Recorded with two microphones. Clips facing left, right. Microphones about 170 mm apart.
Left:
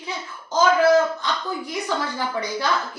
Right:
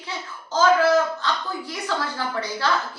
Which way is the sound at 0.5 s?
15° left (ahead or behind).